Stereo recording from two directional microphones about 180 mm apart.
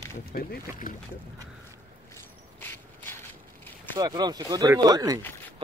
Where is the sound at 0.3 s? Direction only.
55° left (ahead or behind).